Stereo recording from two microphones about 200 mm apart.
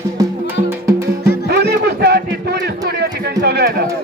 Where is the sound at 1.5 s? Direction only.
55° right (ahead or behind).